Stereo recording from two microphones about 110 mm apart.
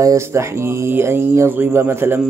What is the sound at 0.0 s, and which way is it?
Speech, 25° right (ahead or behind).